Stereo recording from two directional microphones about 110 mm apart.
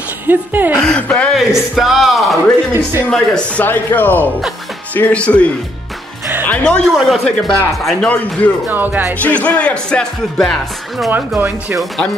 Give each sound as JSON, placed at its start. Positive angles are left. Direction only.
{"t": 0.3, "sound": "music", "side_deg": -15}
{"t": 0.7, "sound": "speech", "side_deg": 10}
{"t": 1.3, "sound": "a man's voice", "side_deg": -5}
{"t": 2.7, "sound": "speech", "side_deg": -25}
{"t": 3.1, "sound": "a man's voice", "side_deg": 10}
{"t": 8.6, "sound": "music", "side_deg": -15}
{"t": 9.2, "sound": "speech", "side_deg": 10}
{"t": 11.1, "sound": "music", "side_deg": -15}